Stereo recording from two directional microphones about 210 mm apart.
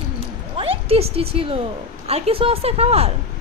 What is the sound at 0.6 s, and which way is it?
A woman's voice, 25° right (ahead or behind).